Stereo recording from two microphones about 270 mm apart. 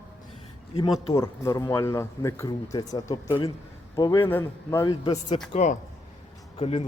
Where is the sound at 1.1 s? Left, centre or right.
Centre.